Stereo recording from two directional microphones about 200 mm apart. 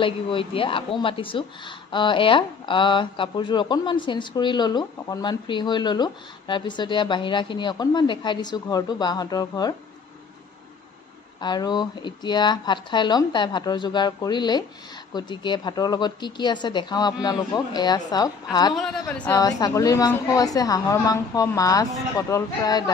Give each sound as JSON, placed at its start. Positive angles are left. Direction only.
{"t": 0.0, "sound": "speech", "side_deg": 25}
{"t": 11.4, "sound": "speech", "side_deg": 20}
{"t": 18.8, "sound": "a woman's voice", "side_deg": 5}
{"t": 19.4, "sound": "a woman's voice", "side_deg": 20}